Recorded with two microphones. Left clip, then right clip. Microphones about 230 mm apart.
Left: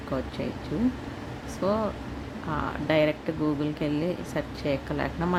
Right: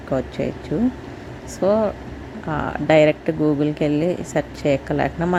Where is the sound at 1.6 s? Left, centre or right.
Centre.